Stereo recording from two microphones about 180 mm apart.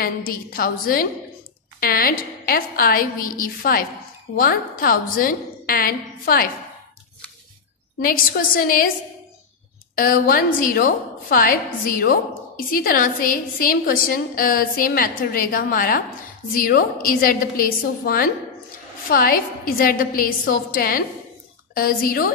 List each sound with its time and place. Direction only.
0.0 s a woman's voice: 55° left (ahead or behind)
8.0 s a woman's voice: 55° left (ahead or behind)
9.9 s a woman's voice: 50° left (ahead or behind)